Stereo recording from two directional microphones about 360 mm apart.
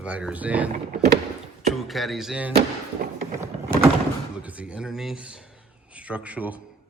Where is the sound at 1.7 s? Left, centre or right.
Centre.